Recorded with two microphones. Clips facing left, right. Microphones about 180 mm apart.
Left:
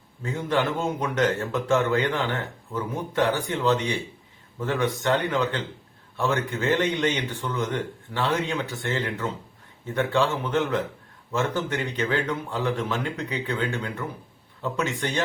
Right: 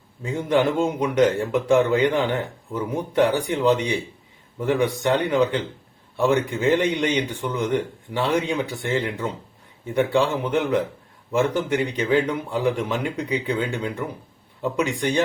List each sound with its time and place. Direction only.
0.2 s a man's voice: 15° right (ahead or behind)